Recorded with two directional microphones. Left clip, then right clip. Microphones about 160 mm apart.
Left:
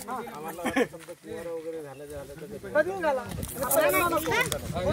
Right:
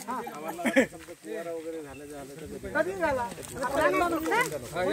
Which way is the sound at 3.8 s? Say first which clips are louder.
Left 2 dB; 5° left (ahead or behind).